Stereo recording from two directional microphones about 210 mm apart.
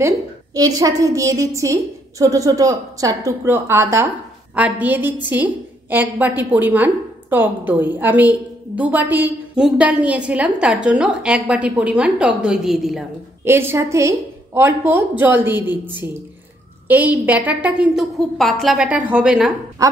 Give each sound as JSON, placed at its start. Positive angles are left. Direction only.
{"t": 0.6, "sound": "a woman's voice", "side_deg": -15}